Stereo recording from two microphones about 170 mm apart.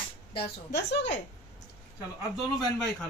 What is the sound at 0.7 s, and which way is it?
Speech, 90° left.